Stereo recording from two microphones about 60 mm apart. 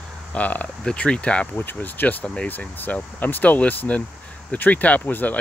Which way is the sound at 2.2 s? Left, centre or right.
Centre.